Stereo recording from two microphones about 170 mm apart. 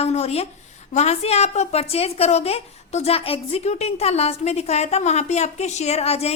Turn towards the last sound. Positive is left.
turn(degrees=35)  # may be behind; listen again after turning